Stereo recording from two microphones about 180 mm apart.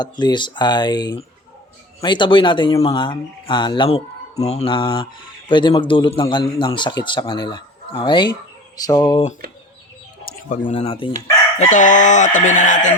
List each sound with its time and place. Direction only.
0.0 s a man's voice: 25° left (ahead or behind)
10.7 s speech: 35° left (ahead or behind)
11.5 s chicken: 40° left (ahead or behind)